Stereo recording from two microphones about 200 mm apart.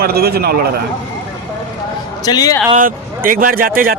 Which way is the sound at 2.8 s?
45° right (ahead or behind).